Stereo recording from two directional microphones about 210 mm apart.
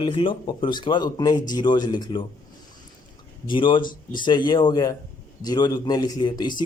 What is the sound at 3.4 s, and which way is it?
Speech, 25° left (ahead or behind).